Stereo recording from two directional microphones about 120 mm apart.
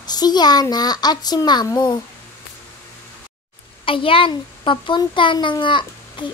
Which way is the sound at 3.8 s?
50° left (ahead or behind).